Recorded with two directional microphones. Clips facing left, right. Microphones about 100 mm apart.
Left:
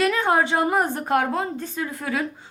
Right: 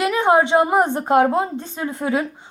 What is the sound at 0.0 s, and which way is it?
A woman's voice, 20° right (ahead or behind).